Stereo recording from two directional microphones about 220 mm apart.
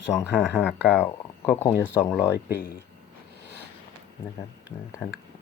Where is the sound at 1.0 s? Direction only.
10° left (ahead or behind).